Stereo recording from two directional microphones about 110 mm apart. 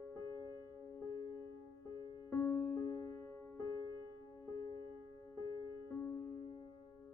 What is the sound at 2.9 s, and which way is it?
Music, 35° left (ahead or behind).